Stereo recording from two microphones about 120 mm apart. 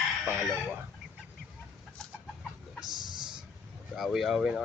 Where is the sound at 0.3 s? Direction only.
15° right (ahead or behind).